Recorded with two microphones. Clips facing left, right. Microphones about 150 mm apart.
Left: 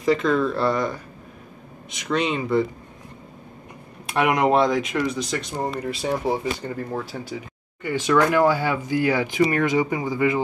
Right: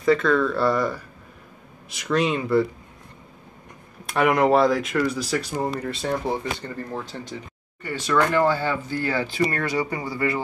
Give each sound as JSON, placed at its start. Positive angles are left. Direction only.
{"t": 0.3, "sound": "speech", "side_deg": 20}
{"t": 0.6, "sound": "speech", "side_deg": 0}
{"t": 2.0, "sound": "speech", "side_deg": 0}
{"t": 4.0, "sound": "speech", "side_deg": 0}